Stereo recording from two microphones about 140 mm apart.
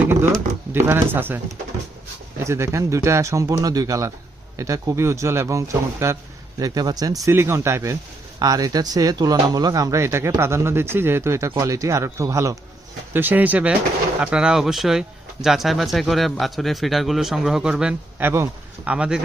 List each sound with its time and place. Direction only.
0.0 s a sound: 15° right (ahead or behind)
0.7 s speech: 15° right (ahead or behind)
2.4 s speech: 20° right (ahead or behind)